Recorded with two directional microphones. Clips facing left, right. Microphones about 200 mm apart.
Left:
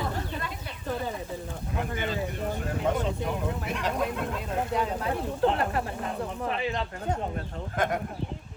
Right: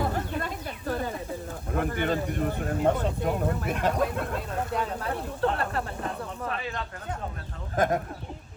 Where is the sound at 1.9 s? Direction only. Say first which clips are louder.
Right 4 dB; 55° right (ahead or behind).